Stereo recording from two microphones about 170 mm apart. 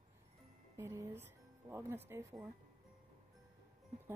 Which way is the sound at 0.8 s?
15° right (ahead or behind).